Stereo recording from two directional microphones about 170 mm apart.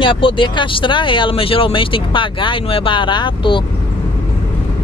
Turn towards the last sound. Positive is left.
turn(degrees=30)  # may be behind; listen again after turning